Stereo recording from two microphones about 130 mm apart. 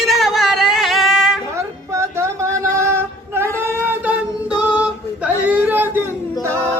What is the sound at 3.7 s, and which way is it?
Female singing, 15° right (ahead or behind).